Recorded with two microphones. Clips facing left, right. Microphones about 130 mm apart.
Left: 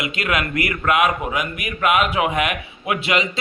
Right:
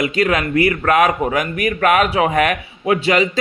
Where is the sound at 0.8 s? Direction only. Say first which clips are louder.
Right 4 dB; 40° right (ahead or behind).